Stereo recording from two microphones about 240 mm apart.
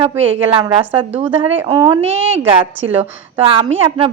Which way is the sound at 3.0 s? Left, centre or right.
Right.